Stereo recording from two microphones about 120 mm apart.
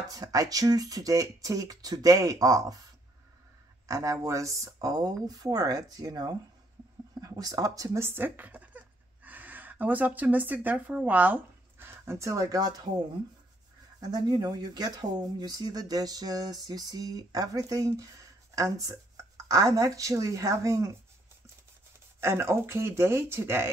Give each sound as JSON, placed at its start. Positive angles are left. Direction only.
{"t": 0.1, "sound": "speech", "side_deg": -30}
{"t": 3.8, "sound": "speech", "side_deg": -25}
{"t": 14.0, "sound": "speech", "side_deg": -35}
{"t": 22.2, "sound": "speech", "side_deg": -20}